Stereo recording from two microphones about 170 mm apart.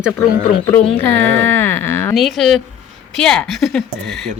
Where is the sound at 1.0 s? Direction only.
10° left (ahead or behind).